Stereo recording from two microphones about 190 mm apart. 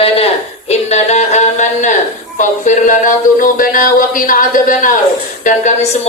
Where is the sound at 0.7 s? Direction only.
35° left (ahead or behind).